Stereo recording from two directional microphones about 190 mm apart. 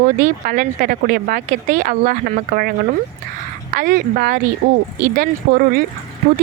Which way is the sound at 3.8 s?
50° right (ahead or behind).